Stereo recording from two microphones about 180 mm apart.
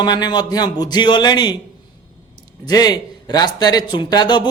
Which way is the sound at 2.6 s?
20° left (ahead or behind).